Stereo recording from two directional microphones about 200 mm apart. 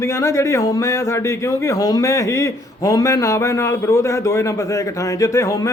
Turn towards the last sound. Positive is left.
turn(degrees=15)  # may be behind; listen again after turning